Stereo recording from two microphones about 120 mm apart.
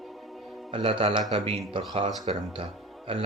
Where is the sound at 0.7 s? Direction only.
45° right (ahead or behind).